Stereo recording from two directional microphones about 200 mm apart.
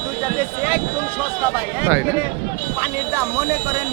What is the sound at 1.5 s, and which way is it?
Speech, 10° right (ahead or behind).